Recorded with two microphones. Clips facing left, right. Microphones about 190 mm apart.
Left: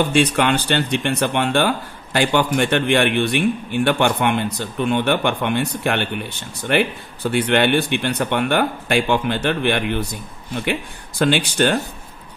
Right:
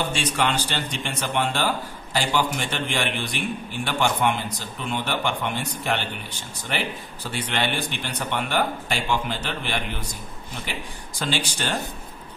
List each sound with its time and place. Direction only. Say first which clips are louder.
0.1 s a man's voice: left 8 dB; 60° left (ahead or behind)